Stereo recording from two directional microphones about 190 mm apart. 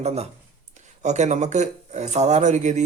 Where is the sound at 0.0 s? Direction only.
35° right (ahead or behind).